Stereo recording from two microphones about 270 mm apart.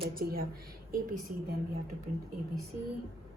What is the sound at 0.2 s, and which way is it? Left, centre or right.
Speech, right.